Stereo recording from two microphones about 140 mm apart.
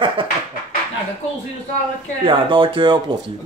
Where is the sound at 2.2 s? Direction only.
40° right (ahead or behind).